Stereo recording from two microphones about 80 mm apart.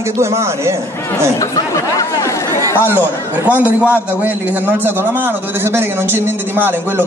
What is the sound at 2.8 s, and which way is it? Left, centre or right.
A man's voice, right.